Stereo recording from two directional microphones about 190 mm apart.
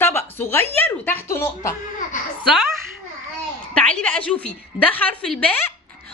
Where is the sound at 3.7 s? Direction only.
5° left (ahead or behind).